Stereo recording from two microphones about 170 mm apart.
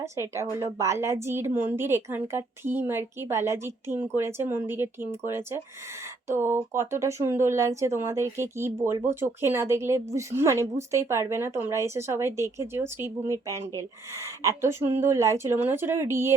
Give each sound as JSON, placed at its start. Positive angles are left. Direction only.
{"t": 0.0, "sound": "speech", "side_deg": -15}